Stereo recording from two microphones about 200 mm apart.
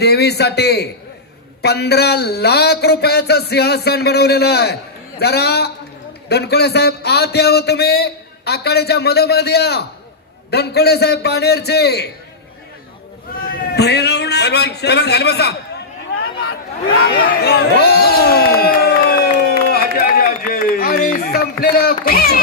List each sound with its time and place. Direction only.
0.0 s a man's voice: 55° left (ahead or behind)
13.3 s a man's voice: 50° left (ahead or behind)
19.7 s a sound: 50° left (ahead or behind)